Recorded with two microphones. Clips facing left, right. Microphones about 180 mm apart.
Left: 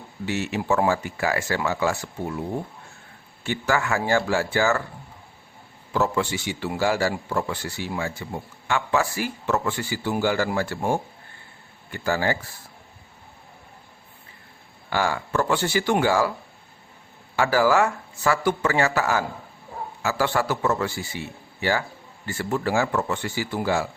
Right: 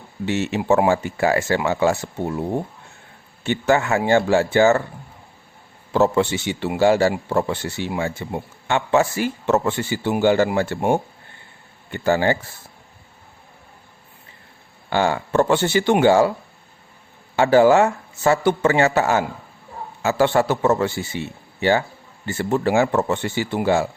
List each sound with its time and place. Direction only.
0.3 s a man's voice: 25° right (ahead or behind)
5.9 s a man's voice: 25° right (ahead or behind)
14.8 s a man's voice: 25° right (ahead or behind)
17.3 s a man's voice: 25° right (ahead or behind)